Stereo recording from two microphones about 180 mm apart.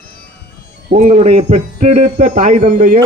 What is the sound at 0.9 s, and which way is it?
A man's voice, 35° right (ahead or behind).